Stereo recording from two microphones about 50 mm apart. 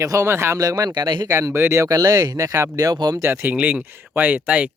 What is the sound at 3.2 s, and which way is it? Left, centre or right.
Speech, right.